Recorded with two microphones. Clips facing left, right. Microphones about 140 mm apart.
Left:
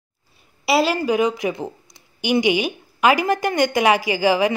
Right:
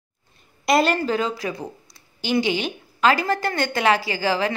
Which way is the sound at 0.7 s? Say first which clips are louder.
Left 1 dB; 5° left (ahead or behind).